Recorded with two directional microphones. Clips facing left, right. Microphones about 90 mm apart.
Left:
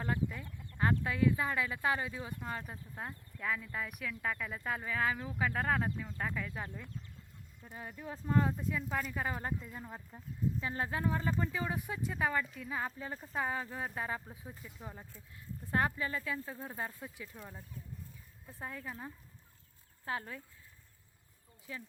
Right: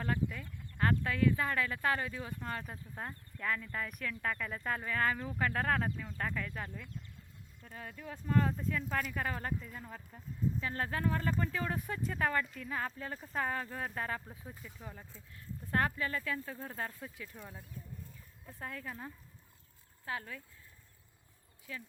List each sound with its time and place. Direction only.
0.0 s speech: 15° left (ahead or behind)
18.6 s speech: 15° left (ahead or behind)
20.1 s speech: 30° left (ahead or behind)
21.7 s speech: 25° left (ahead or behind)